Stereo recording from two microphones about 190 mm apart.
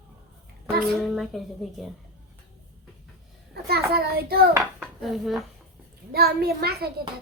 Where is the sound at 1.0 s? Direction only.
Centre (ahead or behind).